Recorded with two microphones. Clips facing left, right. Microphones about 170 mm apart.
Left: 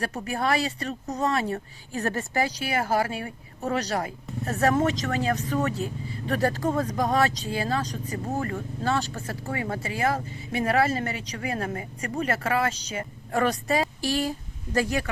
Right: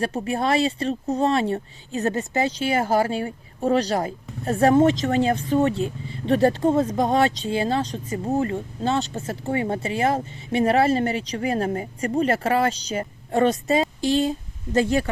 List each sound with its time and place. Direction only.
0.0 s speech: 25° right (ahead or behind)